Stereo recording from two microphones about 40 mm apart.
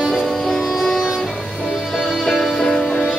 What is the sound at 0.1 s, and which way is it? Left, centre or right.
Music, centre.